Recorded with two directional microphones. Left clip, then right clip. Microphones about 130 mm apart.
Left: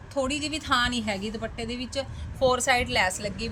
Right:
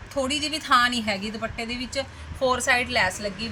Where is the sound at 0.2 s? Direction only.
10° left (ahead or behind).